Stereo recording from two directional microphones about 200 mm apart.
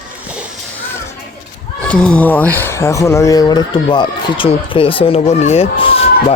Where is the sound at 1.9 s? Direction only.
5° left (ahead or behind).